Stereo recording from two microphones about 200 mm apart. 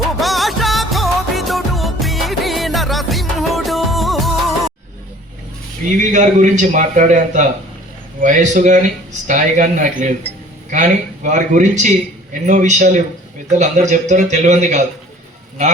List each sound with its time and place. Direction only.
0.2 s music: centre (ahead or behind)
6.0 s speech: 35° right (ahead or behind)